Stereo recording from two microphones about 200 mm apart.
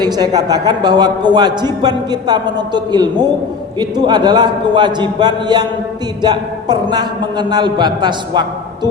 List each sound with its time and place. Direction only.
0.0 s a man's voice: 20° right (ahead or behind)